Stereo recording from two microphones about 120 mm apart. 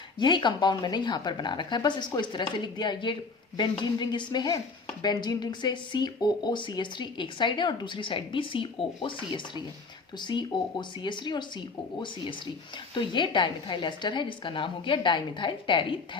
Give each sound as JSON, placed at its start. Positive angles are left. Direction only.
{"t": 0.2, "sound": "speech", "side_deg": 40}